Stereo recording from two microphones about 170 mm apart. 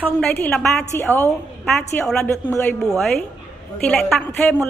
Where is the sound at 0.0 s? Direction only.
10° left (ahead or behind).